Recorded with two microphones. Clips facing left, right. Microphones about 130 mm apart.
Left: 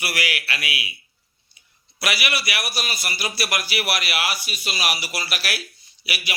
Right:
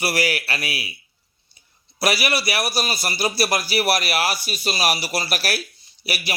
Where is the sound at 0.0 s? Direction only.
35° right (ahead or behind).